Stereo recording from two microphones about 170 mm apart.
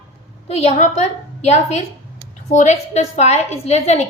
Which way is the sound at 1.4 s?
45° left (ahead or behind).